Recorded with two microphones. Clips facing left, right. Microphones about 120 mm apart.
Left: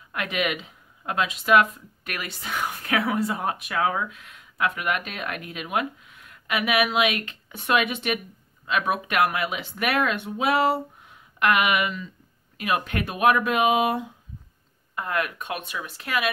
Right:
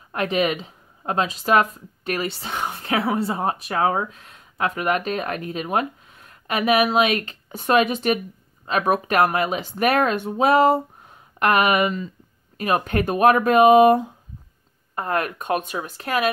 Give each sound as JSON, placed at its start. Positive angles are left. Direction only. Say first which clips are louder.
{"t": 0.1, "sound": "speech", "louder": "right 6 dB", "side_deg": -35}